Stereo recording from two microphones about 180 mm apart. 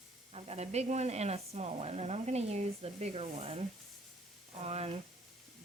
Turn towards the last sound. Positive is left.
turn(degrees=-35)  # may be behind; listen again after turning